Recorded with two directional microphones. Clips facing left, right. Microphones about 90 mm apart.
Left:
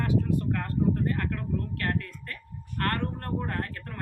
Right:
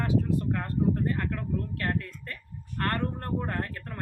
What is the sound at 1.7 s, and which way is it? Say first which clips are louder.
Speech: even; 20° right (ahead or behind).